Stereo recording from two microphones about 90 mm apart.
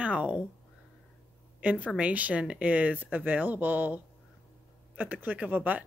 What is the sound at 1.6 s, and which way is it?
Speech, 15° right (ahead or behind).